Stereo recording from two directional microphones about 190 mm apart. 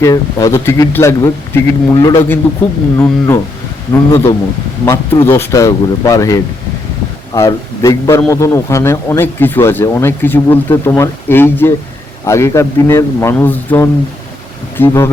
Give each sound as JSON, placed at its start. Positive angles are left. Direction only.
{"t": 0.0, "sound": "speech", "side_deg": 15}